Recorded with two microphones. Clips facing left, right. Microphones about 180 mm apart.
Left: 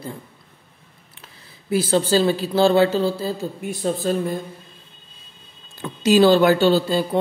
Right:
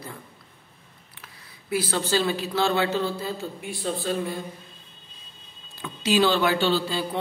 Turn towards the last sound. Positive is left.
turn(degrees=45)  # may be behind; listen again after turning